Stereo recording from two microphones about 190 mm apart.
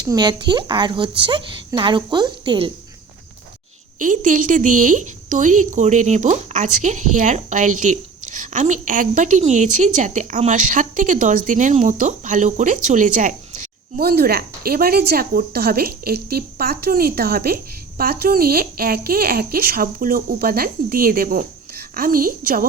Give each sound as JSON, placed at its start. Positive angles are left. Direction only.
{"t": 0.0, "sound": "a woman's voice", "side_deg": -20}
{"t": 3.9, "sound": "a woman's voice", "side_deg": -45}